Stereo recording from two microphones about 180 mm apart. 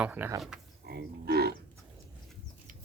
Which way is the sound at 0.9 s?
65° right (ahead or behind).